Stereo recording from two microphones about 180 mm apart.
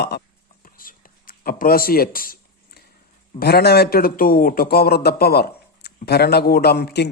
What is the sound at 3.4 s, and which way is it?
A man's voice, 60° left (ahead or behind).